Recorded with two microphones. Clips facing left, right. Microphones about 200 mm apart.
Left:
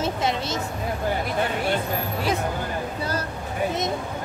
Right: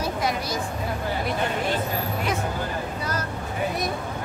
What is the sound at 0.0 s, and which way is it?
Vehicle, 25° left (ahead or behind).